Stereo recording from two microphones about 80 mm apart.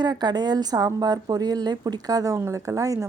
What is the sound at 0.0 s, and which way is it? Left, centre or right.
A woman's voice, right.